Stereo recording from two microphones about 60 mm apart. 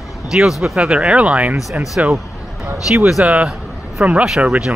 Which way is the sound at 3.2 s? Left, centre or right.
Right.